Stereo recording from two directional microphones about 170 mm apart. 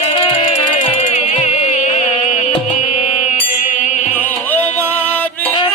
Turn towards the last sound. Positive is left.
turn(degrees=10)  # may be behind; listen again after turning